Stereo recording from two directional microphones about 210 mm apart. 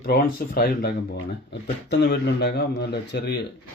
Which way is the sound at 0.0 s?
45° left (ahead or behind).